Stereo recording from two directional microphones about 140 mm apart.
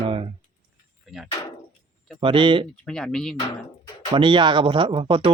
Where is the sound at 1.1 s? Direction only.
5° right (ahead or behind).